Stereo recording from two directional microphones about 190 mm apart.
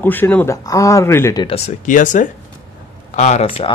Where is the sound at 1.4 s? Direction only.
35° left (ahead or behind).